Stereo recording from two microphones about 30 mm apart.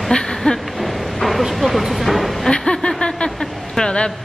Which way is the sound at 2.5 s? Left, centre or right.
Left.